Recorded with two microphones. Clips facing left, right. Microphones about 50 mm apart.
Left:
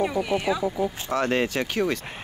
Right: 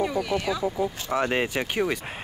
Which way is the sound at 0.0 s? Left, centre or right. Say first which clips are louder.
Left 1 dB; centre.